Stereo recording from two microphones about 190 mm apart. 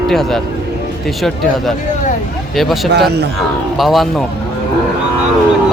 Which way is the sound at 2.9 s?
60° right (ahead or behind).